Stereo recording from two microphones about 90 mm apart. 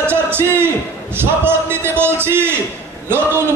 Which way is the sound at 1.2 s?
25° right (ahead or behind).